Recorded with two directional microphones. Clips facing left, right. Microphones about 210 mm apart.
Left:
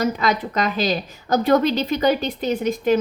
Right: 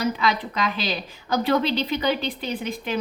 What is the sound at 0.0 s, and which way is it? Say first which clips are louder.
A woman's voice: left 3 dB; 45° left (ahead or behind).